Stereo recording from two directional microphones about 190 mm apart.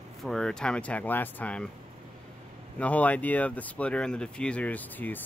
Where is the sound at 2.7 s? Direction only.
10° left (ahead or behind).